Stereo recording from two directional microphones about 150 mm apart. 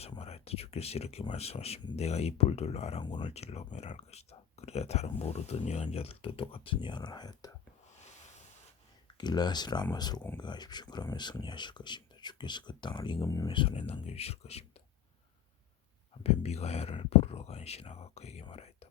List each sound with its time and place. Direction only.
0.2 s speech: 45° left (ahead or behind)
3.0 s speech: 30° left (ahead or behind)
3.3 s speech: 45° left (ahead or behind); by 7.5 s 25° left (ahead or behind)
9.1 s speech: 30° left (ahead or behind)
13.2 s speech: 20° left (ahead or behind)
13.5 s speech: 35° left (ahead or behind)
16.2 s speech: 45° left (ahead or behind)
18.5 s whispering: 45° left (ahead or behind)